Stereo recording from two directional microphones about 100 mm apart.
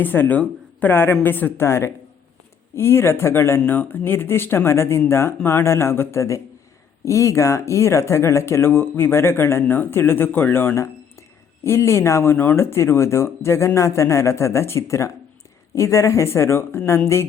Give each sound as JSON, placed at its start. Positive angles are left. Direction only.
{"t": 0.0, "sound": "speech", "side_deg": 20}